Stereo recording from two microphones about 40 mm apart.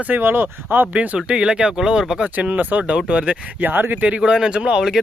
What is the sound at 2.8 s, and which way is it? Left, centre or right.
Speech, right.